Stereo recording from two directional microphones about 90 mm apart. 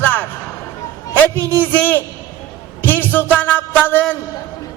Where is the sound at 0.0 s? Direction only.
20° left (ahead or behind).